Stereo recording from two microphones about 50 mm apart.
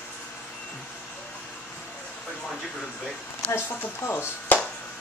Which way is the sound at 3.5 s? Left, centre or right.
Left.